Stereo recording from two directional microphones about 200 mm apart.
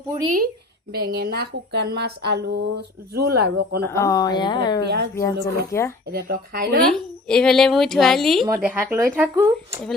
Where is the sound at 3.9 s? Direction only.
15° left (ahead or behind).